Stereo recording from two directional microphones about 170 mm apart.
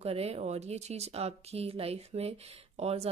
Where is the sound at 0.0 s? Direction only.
35° right (ahead or behind).